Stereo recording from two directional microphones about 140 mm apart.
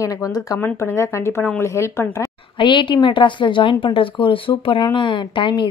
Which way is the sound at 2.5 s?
35° left (ahead or behind).